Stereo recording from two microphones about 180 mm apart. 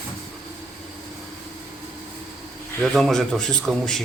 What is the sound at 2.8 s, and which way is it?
A man's voice, centre (ahead or behind).